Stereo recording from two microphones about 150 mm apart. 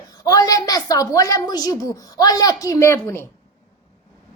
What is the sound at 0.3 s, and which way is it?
A woman's voice, 25° left (ahead or behind).